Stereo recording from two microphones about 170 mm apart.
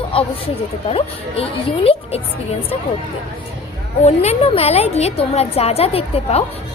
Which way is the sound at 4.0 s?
40° left (ahead or behind).